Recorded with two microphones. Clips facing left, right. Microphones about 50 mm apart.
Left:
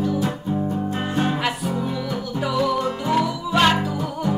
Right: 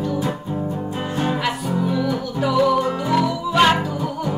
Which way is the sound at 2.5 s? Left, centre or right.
Centre.